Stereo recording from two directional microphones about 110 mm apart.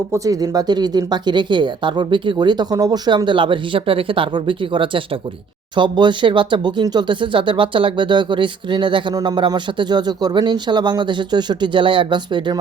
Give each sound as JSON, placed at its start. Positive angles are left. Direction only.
{"t": 0.1, "sound": "speech", "side_deg": -35}